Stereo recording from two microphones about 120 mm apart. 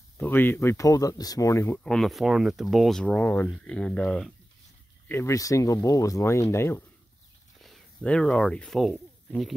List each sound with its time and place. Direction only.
0.2 s speech: 15° left (ahead or behind)
1.8 s speech: 5° left (ahead or behind)
5.0 s a sound: 15° left (ahead or behind)
5.3 s speech: 30° left (ahead or behind)
7.6 s speech: 5° left (ahead or behind)